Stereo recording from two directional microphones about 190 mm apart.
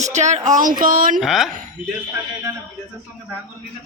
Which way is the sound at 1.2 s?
Centre (ahead or behind).